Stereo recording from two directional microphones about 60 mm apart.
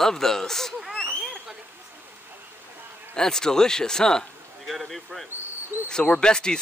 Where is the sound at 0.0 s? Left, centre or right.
Centre.